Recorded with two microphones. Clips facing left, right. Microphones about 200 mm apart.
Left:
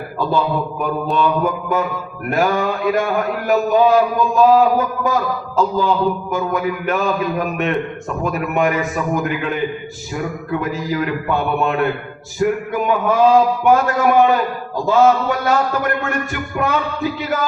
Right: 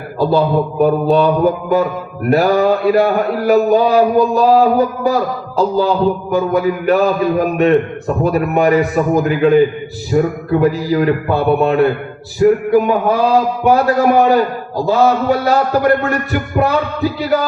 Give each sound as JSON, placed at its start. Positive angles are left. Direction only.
{"t": 0.2, "sound": "a man's voice", "side_deg": -35}